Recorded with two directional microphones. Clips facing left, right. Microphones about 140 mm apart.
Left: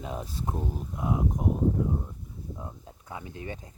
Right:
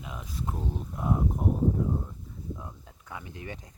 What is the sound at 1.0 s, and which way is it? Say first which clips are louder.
Speech: even; centre (ahead or behind).